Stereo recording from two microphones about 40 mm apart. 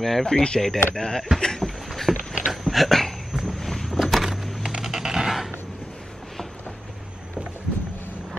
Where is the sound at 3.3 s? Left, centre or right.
Centre.